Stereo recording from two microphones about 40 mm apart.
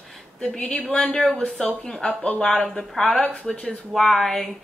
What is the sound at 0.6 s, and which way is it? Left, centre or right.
Speech, left.